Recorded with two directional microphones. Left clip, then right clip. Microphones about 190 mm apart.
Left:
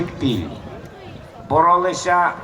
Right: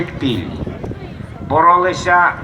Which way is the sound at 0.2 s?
15° left (ahead or behind).